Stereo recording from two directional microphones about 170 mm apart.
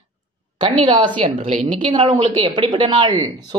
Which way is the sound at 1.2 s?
40° right (ahead or behind).